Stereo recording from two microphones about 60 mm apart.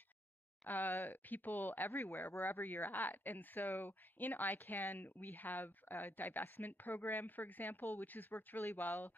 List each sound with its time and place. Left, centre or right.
0.7 s speech: left